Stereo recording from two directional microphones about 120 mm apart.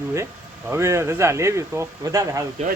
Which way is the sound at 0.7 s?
25° right (ahead or behind).